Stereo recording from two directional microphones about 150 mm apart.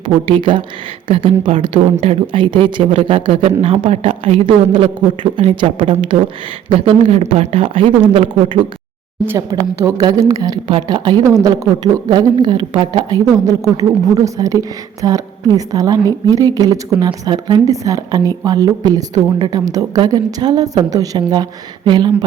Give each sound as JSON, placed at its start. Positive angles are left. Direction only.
{"t": 0.0, "sound": "a woman's voice", "side_deg": -35}
{"t": 9.2, "sound": "a woman's voice", "side_deg": -15}